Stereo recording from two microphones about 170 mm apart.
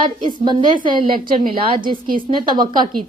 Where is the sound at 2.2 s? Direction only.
25° right (ahead or behind).